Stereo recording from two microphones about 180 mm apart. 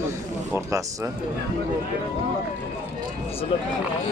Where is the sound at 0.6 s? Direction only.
15° right (ahead or behind).